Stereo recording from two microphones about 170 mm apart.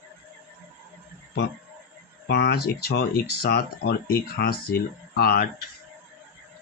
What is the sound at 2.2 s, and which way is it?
Speech, 80° left.